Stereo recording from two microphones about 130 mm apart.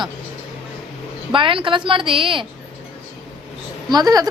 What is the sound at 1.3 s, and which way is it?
A woman's voice, 40° right (ahead or behind).